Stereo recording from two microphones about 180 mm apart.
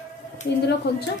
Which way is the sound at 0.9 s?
65° left (ahead or behind).